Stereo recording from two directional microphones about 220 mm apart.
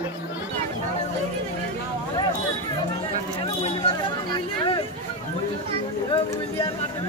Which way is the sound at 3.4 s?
25° left (ahead or behind).